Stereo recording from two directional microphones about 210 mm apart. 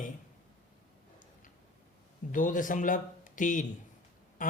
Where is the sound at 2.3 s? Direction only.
40° left (ahead or behind).